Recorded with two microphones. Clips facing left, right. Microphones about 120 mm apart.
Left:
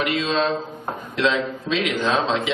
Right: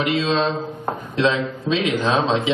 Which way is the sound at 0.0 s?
25° right (ahead or behind).